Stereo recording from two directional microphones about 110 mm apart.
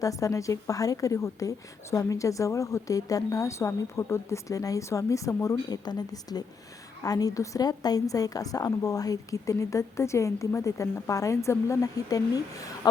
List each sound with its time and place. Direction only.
0.0 s a woman's voice: 30° left (ahead or behind)